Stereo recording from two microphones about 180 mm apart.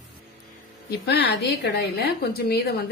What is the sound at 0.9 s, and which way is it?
Speech, 65° left (ahead or behind).